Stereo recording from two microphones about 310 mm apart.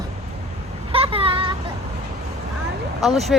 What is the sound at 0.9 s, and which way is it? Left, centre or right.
Vehicle, centre.